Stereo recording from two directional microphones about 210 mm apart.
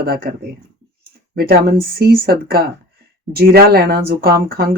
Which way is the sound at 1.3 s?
45° right (ahead or behind).